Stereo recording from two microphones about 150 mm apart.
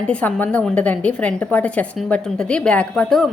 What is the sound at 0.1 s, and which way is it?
A woman's voice, 10° left (ahead or behind).